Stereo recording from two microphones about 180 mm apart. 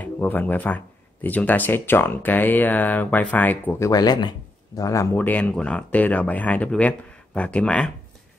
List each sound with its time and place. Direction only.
0.0 s speech: 10° left (ahead or behind)
3.9 s speech: 20° left (ahead or behind); by 7.9 s 5° left (ahead or behind)